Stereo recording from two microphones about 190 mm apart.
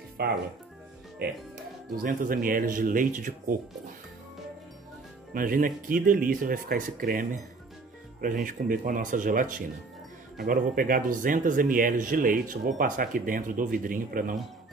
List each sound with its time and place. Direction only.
0.2 s speech: 55° right (ahead or behind)
5.3 s speech: 50° right (ahead or behind)